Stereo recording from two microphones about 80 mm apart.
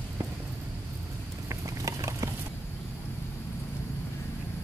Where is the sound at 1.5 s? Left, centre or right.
Right.